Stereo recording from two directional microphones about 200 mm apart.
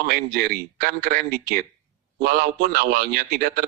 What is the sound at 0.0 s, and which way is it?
A man's voice, 45° right (ahead or behind).